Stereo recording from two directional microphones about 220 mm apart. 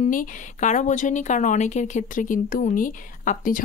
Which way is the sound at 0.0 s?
35° left (ahead or behind).